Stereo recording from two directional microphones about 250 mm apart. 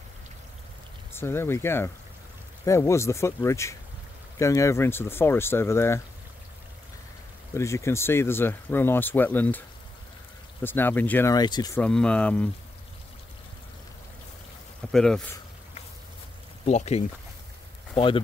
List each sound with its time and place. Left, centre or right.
1.1 s speech: centre
7.5 s speech: centre
11.8 s speech: centre
14.9 s speech: centre
16.6 s speech: left